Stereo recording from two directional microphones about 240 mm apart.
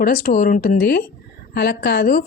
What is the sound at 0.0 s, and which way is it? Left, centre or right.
A woman's voice, left.